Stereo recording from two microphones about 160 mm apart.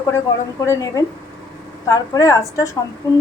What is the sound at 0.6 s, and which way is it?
A woman's voice, 20° left (ahead or behind).